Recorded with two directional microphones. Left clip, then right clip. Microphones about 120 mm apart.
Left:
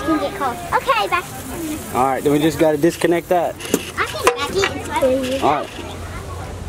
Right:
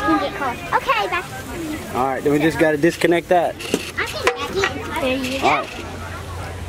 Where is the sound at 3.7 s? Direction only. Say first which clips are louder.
Left 2 dB; 20° left (ahead or behind).